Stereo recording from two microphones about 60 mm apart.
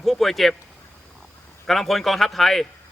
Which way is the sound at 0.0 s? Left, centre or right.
Centre.